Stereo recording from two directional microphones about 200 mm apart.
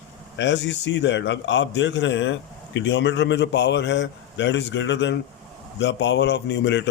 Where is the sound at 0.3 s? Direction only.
60° left (ahead or behind).